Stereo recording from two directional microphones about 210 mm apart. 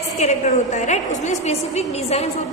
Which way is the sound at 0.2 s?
35° left (ahead or behind).